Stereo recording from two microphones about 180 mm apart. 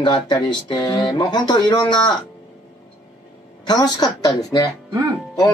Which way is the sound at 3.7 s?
25° left (ahead or behind).